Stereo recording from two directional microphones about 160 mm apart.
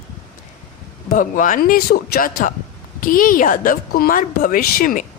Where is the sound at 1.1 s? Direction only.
55° left (ahead or behind).